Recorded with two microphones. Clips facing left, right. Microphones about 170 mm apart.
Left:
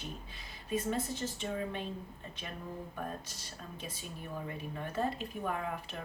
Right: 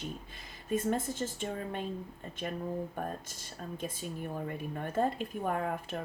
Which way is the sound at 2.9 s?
50° right (ahead or behind).